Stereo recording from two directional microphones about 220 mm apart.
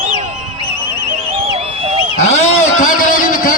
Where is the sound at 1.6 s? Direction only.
30° right (ahead or behind).